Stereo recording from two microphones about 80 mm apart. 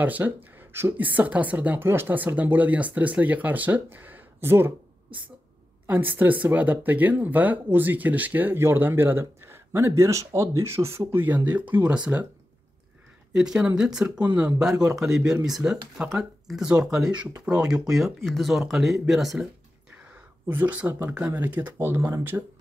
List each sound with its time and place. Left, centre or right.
0.0 s speech: right
11.2 s speech: right
13.3 s speech: centre
14.2 s speech: centre
14.6 s speech: centre
20.4 s speech: right